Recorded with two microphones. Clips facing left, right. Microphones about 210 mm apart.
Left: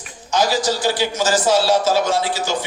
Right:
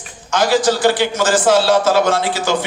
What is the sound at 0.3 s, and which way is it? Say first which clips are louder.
A man's voice: right 4 dB; 55° right (ahead or behind).